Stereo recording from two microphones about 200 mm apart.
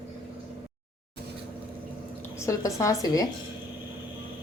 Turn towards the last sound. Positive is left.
turn(degrees=20)  # may be behind; listen again after turning